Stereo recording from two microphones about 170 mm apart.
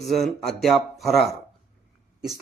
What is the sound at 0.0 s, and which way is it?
A man's voice, centre (ahead or behind).